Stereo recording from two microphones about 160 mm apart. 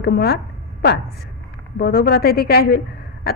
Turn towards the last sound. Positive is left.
turn(degrees=75)  # may be behind; listen again after turning